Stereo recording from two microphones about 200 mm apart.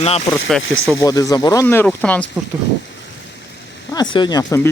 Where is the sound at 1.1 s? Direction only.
15° left (ahead or behind).